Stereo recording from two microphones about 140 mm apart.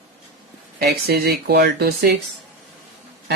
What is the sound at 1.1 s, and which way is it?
Speech, 90° right.